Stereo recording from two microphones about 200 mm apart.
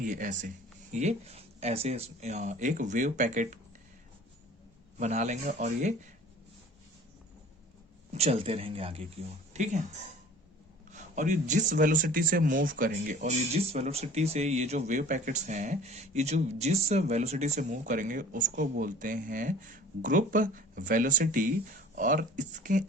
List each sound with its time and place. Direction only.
0.0 s speech: 40° right (ahead or behind)
4.9 s speech: 35° right (ahead or behind)
8.1 s speech: 30° right (ahead or behind)
10.9 s speech: 40° right (ahead or behind)